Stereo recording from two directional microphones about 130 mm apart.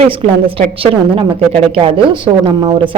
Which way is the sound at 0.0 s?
45° right (ahead or behind).